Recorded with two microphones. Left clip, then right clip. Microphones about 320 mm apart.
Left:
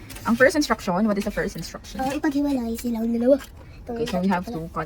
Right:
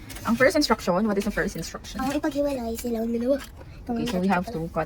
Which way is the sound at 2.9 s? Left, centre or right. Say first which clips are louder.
Left 5 dB; right.